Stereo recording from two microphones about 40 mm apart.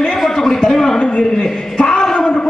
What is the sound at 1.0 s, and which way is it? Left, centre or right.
Speech, left.